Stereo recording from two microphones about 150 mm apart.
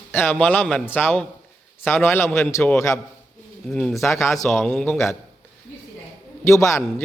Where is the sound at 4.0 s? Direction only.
20° left (ahead or behind).